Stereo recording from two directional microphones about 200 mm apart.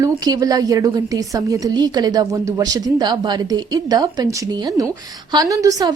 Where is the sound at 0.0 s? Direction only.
20° right (ahead or behind).